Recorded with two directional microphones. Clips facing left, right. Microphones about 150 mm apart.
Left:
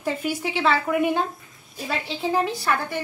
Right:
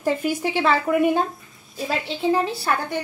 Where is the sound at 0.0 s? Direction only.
45° right (ahead or behind).